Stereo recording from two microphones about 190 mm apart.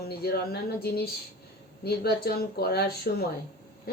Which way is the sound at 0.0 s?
55° left (ahead or behind).